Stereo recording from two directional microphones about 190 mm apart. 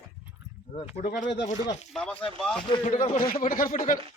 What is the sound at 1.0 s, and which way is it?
Speech, 40° left (ahead or behind).